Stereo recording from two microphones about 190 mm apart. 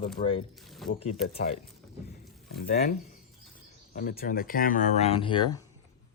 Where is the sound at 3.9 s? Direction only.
50° left (ahead or behind); by 5.5 s 25° left (ahead or behind).